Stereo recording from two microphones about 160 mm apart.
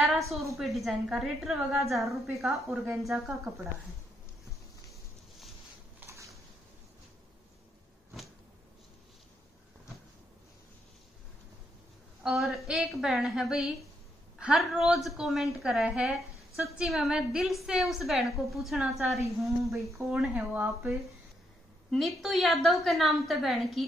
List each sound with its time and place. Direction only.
0.6 s a woman's voice: centre (ahead or behind)
5.9 s a sound: 20° right (ahead or behind)
12.2 s a woman's voice: 5° right (ahead or behind)
21.9 s a woman's voice: centre (ahead or behind)